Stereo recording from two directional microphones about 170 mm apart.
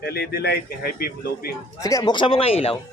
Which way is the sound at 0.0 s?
65° left (ahead or behind).